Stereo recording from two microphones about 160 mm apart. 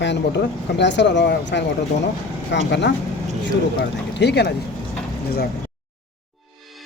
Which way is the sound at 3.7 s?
90° left.